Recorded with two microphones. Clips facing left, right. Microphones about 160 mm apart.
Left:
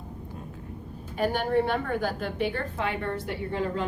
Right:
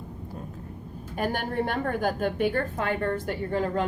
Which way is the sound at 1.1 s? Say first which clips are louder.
Left 3 dB; 45° right (ahead or behind).